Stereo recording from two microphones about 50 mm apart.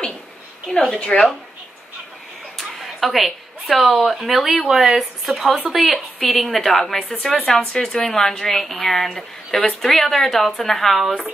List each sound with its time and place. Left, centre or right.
0.7 s a woman's voice: centre
2.5 s a sound: centre
4.0 s speech: centre